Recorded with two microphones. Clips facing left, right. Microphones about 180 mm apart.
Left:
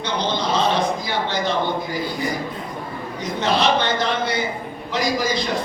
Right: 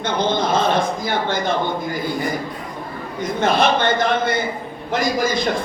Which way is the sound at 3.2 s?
50° right (ahead or behind).